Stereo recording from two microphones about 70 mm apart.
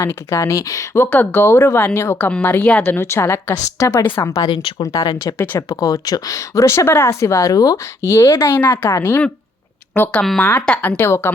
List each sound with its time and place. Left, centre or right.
0.0 s speech: left
0.9 s speech: left
8.0 s speech: left
8.4 s speech: left